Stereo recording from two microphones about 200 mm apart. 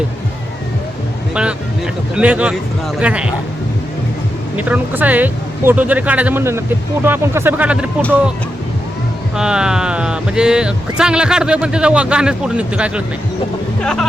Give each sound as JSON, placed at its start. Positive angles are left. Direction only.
{"t": 1.3, "sound": "speech", "side_deg": -5}
{"t": 4.5, "sound": "speech", "side_deg": -10}
{"t": 9.3, "sound": "speech", "side_deg": -5}